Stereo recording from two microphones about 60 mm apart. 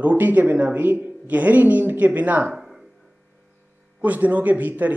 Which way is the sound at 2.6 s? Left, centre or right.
Centre.